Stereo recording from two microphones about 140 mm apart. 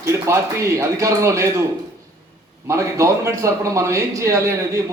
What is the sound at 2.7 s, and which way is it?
A man's voice, 20° right (ahead or behind).